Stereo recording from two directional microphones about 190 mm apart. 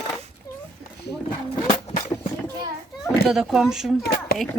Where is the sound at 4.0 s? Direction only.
50° left (ahead or behind).